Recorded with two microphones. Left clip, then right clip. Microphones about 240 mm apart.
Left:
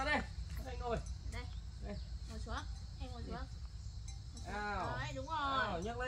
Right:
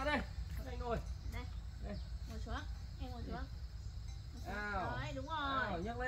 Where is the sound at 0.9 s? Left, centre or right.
Centre.